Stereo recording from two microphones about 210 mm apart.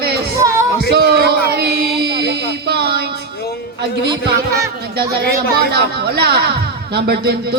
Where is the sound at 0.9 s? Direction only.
50° right (ahead or behind).